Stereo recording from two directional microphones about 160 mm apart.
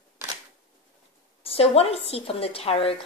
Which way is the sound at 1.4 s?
40° left (ahead or behind).